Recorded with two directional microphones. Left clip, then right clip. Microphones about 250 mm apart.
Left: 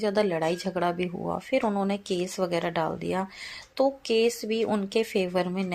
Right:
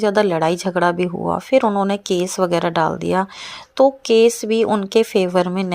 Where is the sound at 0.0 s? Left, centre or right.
Right.